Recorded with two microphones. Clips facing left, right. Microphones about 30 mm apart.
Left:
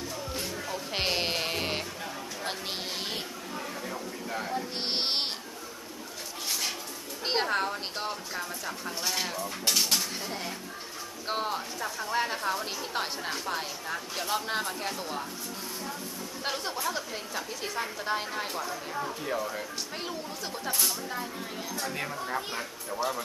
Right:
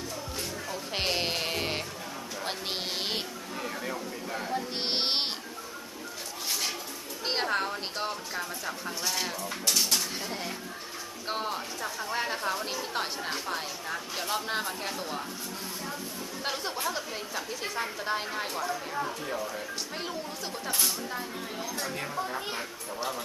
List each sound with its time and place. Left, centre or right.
0.3 s music: centre
2.4 s a sound: centre
2.7 s music: centre
3.9 s a sound: centre
6.5 s a sound: centre
7.3 s a woman's voice: centre
10.0 s a woman's voice: centre
16.4 s a woman's voice: centre
19.3 s a woman's voice: centre
20.7 s speech: centre
21.8 s a woman's voice: centre